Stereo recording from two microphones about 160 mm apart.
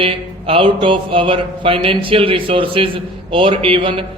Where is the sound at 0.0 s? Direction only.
35° right (ahead or behind).